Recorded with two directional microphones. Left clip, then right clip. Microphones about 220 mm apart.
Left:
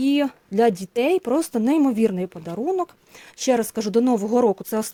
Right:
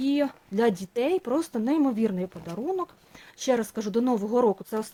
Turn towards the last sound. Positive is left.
turn(degrees=40)  # may be behind; listen again after turning